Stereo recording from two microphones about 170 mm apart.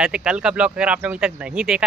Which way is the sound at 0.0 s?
5° right (ahead or behind).